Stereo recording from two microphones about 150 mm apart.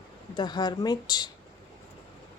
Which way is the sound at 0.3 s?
30° left (ahead or behind).